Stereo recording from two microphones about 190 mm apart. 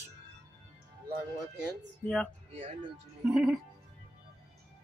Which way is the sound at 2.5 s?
30° right (ahead or behind).